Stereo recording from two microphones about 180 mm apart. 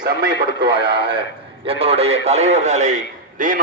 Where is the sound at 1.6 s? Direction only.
35° right (ahead or behind).